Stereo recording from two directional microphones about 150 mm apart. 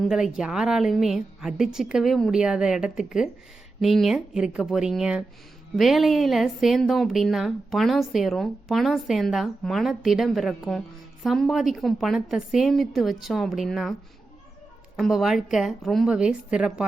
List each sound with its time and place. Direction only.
0.0 s speech: 5° right (ahead or behind)
14.9 s speech: centre (ahead or behind)